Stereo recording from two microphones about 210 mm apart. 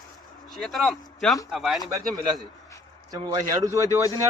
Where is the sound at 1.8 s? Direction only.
15° right (ahead or behind).